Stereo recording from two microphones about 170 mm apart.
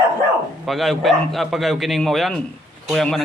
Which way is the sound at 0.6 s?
Centre (ahead or behind).